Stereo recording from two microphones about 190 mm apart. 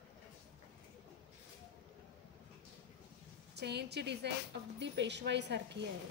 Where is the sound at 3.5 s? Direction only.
60° right (ahead or behind).